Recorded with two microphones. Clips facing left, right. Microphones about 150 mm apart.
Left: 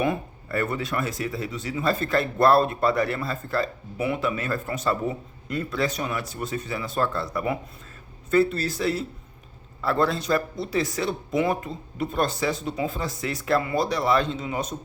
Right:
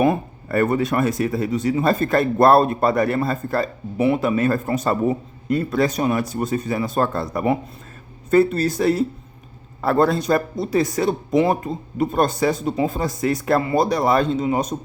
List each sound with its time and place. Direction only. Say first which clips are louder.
0.4 s a man's voice: right 9 dB; 50° right (ahead or behind)
7.3 s a man's voice: right 8 dB; 35° right (ahead or behind)
8.3 s a man's voice: right 5 dB; 45° right (ahead or behind)